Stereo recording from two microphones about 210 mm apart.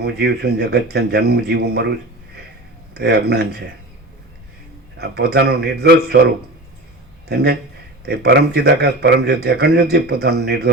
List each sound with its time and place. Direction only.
0.0 s speech: 50° right (ahead or behind)
2.9 s speech: 50° right (ahead or behind)
4.9 s speech: 50° right (ahead or behind)
7.3 s speech: 50° right (ahead or behind)